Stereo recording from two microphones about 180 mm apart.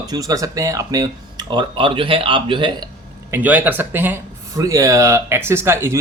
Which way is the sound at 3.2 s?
10° right (ahead or behind).